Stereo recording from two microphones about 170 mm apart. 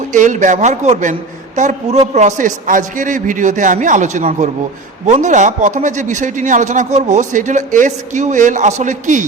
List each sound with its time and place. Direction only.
0.1 s a man's voice: 45° right (ahead or behind)